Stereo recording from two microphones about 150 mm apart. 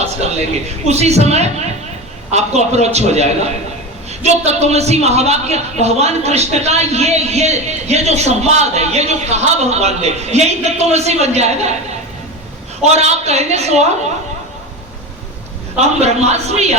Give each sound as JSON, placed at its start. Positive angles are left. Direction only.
{"t": 0.0, "sound": "a sound", "side_deg": -45}
{"t": 0.9, "sound": "a man's voice", "side_deg": -45}
{"t": 12.8, "sound": "a man's voice", "side_deg": -45}
{"t": 15.8, "sound": "a man's voice", "side_deg": -45}